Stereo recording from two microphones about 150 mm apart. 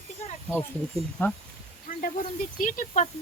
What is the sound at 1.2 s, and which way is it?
Speech, 15° left (ahead or behind).